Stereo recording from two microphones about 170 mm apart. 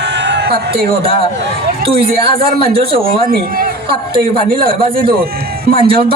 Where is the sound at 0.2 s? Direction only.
90° right.